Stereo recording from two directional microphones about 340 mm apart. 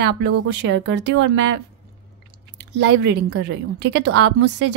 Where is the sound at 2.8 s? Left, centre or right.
Right.